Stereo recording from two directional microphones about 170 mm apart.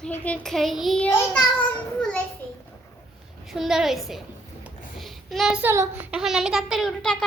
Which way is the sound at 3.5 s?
Centre (ahead or behind).